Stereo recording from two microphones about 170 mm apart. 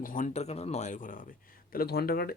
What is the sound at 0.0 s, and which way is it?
A man's voice, 50° left (ahead or behind).